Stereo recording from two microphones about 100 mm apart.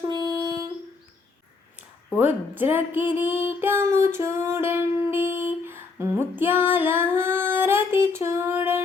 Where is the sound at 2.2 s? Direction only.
20° right (ahead or behind).